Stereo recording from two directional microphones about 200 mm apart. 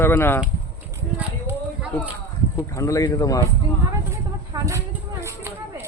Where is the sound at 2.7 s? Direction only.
15° left (ahead or behind).